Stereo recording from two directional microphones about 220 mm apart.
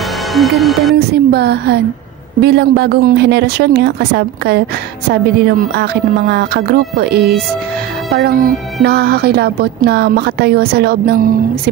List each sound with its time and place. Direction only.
0.3 s music: centre (ahead or behind)
0.9 s speech: 45° right (ahead or behind)